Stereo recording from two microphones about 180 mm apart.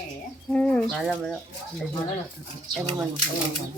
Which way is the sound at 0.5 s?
5° left (ahead or behind).